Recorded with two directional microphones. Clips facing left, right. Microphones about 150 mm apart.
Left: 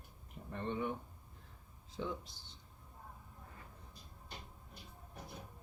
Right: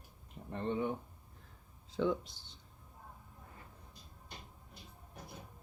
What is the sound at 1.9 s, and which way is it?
Speech, 65° right (ahead or behind).